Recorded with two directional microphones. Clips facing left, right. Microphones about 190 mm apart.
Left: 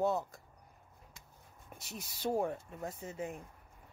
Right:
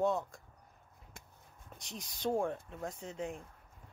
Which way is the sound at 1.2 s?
50° right (ahead or behind).